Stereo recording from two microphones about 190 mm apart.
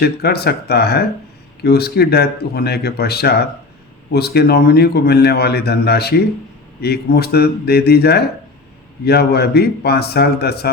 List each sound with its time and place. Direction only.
0.0 s speech: 55° left (ahead or behind)